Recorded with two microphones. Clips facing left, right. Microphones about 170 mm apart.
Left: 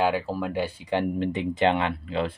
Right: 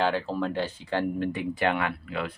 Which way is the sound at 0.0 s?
10° left (ahead or behind).